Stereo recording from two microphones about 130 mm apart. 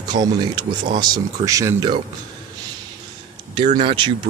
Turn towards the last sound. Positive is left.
turn(degrees=-40)  # may be behind; listen again after turning